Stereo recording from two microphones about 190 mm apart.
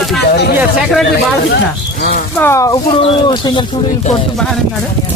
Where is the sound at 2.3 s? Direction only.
15° left (ahead or behind).